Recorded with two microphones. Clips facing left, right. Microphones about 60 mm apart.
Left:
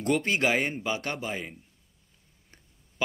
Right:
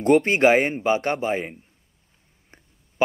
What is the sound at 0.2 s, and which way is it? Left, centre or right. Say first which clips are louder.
Speech: right 8 dB; right.